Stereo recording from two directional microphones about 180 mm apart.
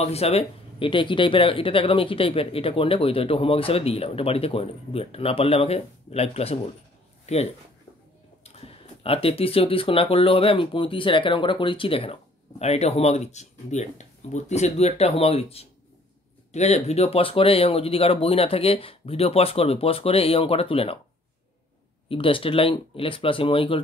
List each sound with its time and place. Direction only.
0.0 s speech: 35° left (ahead or behind)
8.5 s speech: 35° left (ahead or behind)
22.1 s speech: 30° left (ahead or behind)